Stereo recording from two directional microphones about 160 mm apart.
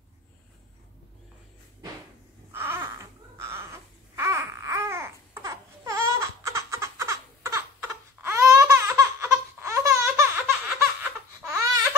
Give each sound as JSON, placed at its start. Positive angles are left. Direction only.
{"t": 2.5, "sound": "babbling", "side_deg": -15}
{"t": 11.5, "sound": "baby cry", "side_deg": -20}